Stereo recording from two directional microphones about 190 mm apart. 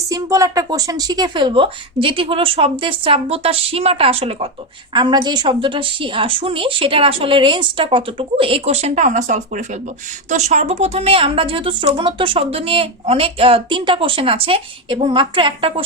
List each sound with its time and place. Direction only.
0.1 s a woman's voice: 15° right (ahead or behind)